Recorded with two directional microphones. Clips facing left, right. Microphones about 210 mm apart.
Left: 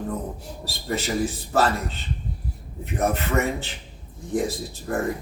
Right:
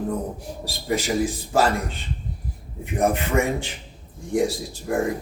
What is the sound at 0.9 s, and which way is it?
Speech, 10° right (ahead or behind).